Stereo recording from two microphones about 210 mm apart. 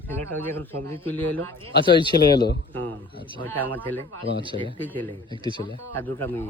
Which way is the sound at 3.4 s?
10° left (ahead or behind).